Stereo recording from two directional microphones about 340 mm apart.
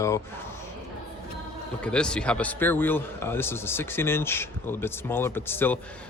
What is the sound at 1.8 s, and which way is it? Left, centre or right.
A man's voice, centre.